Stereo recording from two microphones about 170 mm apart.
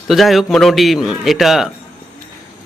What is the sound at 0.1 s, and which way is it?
A man's voice, centre (ahead or behind).